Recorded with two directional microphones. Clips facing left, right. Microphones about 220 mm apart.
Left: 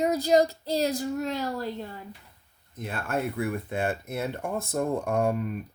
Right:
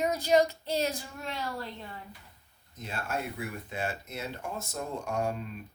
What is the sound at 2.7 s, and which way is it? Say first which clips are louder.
Speech: left 5 dB; 55° left (ahead or behind).